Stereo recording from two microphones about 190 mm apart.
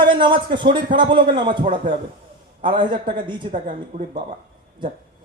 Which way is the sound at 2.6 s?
25° right (ahead or behind).